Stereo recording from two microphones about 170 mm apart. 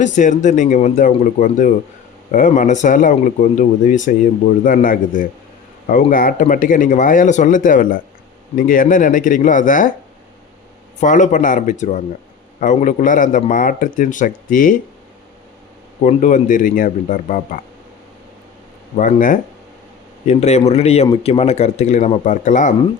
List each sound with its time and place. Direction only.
0.0 s speech: 45° left (ahead or behind)
11.0 s speech: 45° left (ahead or behind)
16.0 s speech: 45° left (ahead or behind)
18.9 s speech: 50° left (ahead or behind)
20.2 s speech: 40° left (ahead or behind)